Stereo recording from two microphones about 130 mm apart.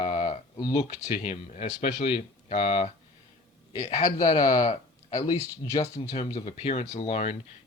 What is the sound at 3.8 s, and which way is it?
Speech, 55° left (ahead or behind).